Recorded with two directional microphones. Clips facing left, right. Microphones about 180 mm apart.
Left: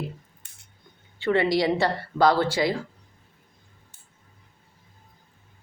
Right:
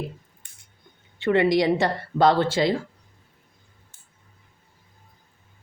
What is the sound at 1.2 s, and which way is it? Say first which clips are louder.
Speech: right 2 dB; 20° right (ahead or behind).